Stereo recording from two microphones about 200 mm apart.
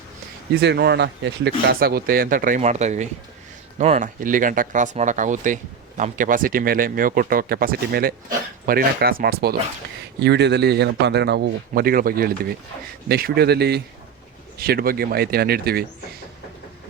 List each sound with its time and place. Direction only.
0.6 s a man's voice: 55° right (ahead or behind)